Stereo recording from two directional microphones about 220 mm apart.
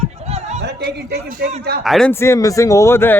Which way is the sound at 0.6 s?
50° right (ahead or behind).